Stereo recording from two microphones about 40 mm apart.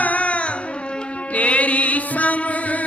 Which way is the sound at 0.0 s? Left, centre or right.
Left.